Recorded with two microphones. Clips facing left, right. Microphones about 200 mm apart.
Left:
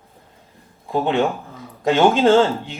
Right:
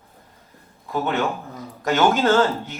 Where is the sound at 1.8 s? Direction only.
25° left (ahead or behind).